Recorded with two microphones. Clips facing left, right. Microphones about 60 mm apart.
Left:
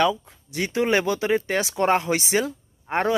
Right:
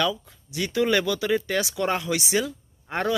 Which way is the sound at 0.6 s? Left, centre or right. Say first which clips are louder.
Left 1 dB; left.